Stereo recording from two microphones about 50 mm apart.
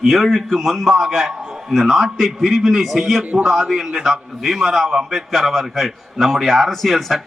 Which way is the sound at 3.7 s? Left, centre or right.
Centre.